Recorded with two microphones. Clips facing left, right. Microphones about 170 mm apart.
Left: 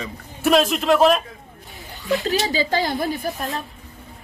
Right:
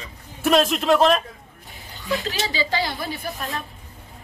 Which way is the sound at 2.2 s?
45° left (ahead or behind).